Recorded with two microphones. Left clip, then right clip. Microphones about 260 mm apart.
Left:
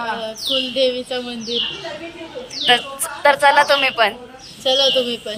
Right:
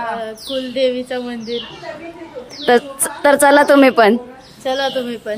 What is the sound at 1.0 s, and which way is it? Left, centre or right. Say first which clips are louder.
Speech: right 1 dB; centre.